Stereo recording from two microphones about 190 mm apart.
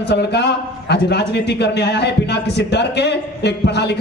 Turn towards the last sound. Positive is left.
turn(degrees=60)  # may be behind; listen again after turning